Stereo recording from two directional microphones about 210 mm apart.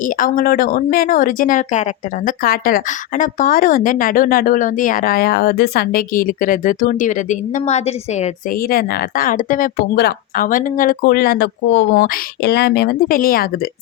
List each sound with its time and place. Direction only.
0.0 s speech: 40° left (ahead or behind)
8.7 s speech: 45° left (ahead or behind)